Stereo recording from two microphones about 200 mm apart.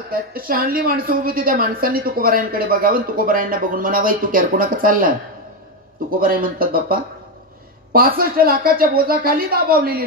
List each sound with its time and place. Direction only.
0.1 s a woman's voice: 45° right (ahead or behind)